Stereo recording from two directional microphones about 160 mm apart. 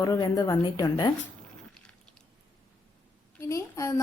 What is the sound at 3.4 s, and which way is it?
Speech, 20° left (ahead or behind).